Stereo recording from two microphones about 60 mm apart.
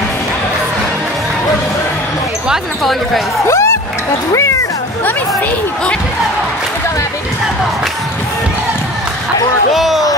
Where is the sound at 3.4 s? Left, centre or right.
Left.